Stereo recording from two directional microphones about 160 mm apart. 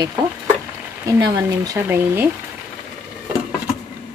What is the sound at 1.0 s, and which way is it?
Speech, 20° right (ahead or behind).